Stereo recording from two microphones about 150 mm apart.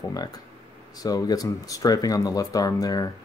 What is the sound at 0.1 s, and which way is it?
Speech, 25° left (ahead or behind).